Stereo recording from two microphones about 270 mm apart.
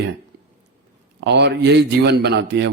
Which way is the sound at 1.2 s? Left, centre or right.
Right.